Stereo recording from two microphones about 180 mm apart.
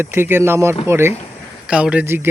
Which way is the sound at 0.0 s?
15° right (ahead or behind).